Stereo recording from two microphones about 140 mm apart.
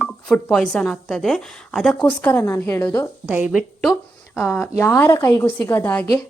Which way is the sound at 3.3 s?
10° right (ahead or behind).